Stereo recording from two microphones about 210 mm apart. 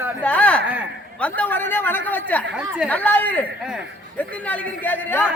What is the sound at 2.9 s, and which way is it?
Speech, 10° left (ahead or behind).